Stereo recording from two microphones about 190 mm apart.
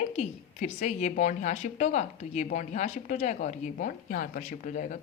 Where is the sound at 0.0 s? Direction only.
35° left (ahead or behind).